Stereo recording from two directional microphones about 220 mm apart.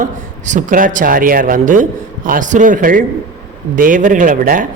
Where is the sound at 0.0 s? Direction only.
35° right (ahead or behind).